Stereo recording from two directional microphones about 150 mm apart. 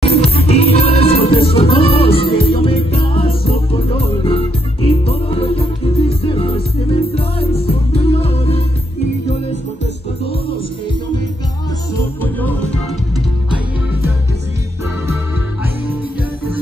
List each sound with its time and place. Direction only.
0.0 s music: 40° left (ahead or behind)
12.2 s music: 10° left (ahead or behind)